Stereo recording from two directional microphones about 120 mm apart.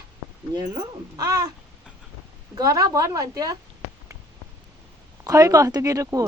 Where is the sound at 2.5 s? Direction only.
30° right (ahead or behind).